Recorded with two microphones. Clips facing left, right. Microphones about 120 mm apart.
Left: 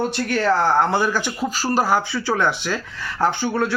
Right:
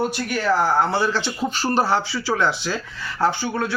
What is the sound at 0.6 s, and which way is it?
Speech, 20° left (ahead or behind).